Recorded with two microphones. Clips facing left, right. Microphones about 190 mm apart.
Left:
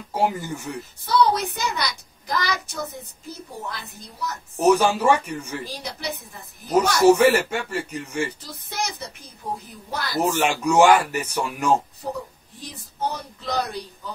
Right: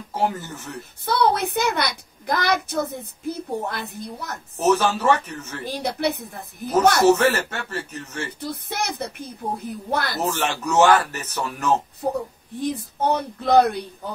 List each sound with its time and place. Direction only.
0.1 s speech: 10° left (ahead or behind)
1.0 s a child's voice: 55° right (ahead or behind)
4.6 s speech: 10° left (ahead or behind)
5.7 s a child's voice: 55° right (ahead or behind)
7.1 s speech: 10° left (ahead or behind)
8.4 s a child's voice: 60° right (ahead or behind)
10.2 s speech: 10° left (ahead or behind)
12.5 s a child's voice: 55° right (ahead or behind)